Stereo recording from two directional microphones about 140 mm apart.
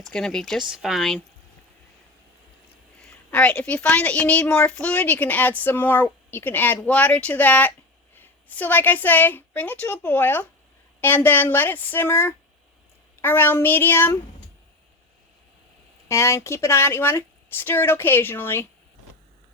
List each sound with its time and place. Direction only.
0.1 s speech: 5° left (ahead or behind)
3.0 s a woman's voice: 15° left (ahead or behind)
16.0 s a woman's voice: 20° left (ahead or behind)